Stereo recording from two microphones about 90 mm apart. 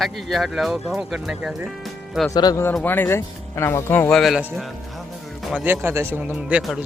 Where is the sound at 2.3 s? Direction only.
50° left (ahead or behind).